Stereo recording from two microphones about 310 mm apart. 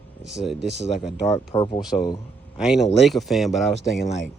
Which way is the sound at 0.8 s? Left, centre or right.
Centre.